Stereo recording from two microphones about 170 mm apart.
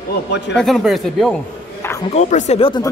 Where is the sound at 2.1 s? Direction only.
45° left (ahead or behind).